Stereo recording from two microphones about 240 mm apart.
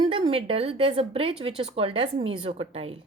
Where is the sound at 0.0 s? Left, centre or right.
Right.